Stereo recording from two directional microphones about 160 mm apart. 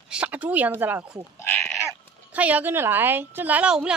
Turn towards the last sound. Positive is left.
turn(degrees=-5)  # may be behind; listen again after turning